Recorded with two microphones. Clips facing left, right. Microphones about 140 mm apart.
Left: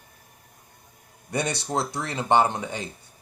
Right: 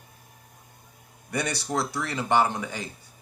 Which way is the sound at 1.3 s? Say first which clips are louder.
Left 1 dB; 25° left (ahead or behind).